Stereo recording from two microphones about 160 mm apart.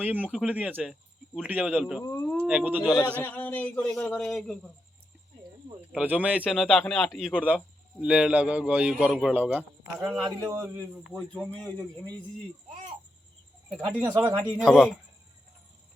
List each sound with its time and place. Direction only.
0.0 s a man's voice: 10° right (ahead or behind)
2.0 s speech: 20° left (ahead or behind)
2.5 s a man's voice: 10° right (ahead or behind)
3.2 s singing: 10° left (ahead or behind)
3.9 s a man's voice: 5° left (ahead or behind)
5.9 s a man's voice: 10° right (ahead or behind)
10.2 s a man's voice: 20° right (ahead or behind)
11.1 s singing: 5° left (ahead or behind)
14.0 s a man's voice: 25° right (ahead or behind)
14.6 s a man's voice: centre (ahead or behind)